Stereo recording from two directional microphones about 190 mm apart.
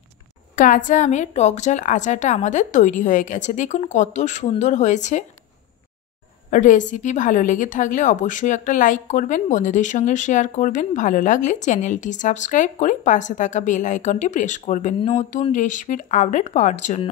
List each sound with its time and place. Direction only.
0.6 s a woman's voice: 45° left (ahead or behind)
6.5 s a woman's voice: 40° left (ahead or behind)